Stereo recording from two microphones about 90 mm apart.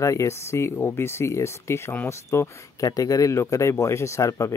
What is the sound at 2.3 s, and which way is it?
Speech, 35° left (ahead or behind).